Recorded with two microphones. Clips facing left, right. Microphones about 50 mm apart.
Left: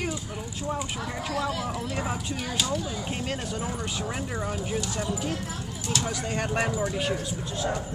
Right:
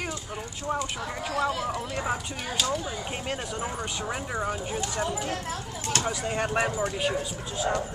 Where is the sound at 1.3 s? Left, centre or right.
Centre.